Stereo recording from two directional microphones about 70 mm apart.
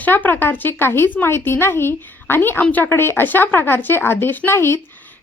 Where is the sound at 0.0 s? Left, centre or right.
Left.